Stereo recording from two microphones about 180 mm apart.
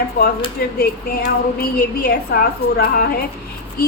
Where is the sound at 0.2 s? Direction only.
55° left (ahead or behind).